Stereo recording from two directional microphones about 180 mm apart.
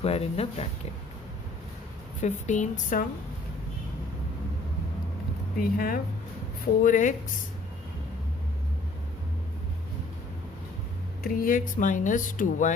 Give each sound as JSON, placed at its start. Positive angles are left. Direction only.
{"t": 0.0, "sound": "speech", "side_deg": 35}
{"t": 2.2, "sound": "speech", "side_deg": 40}
{"t": 5.5, "sound": "speech", "side_deg": 55}
{"t": 11.2, "sound": "speech", "side_deg": 50}